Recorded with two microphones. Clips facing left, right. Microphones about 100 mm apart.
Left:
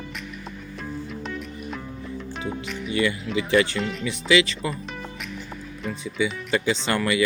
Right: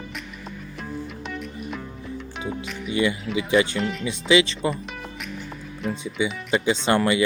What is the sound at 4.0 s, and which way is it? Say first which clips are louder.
Speech: right 1 dB; 20° right (ahead or behind).